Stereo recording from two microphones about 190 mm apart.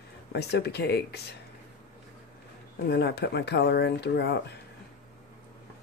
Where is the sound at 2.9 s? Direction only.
60° left (ahead or behind).